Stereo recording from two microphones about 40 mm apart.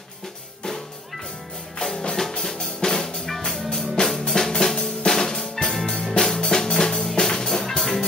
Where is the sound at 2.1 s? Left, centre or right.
Centre.